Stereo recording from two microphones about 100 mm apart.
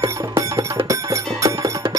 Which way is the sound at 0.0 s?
25° right (ahead or behind).